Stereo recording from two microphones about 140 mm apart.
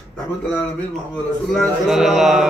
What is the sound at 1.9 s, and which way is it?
Mantra, 5° right (ahead or behind).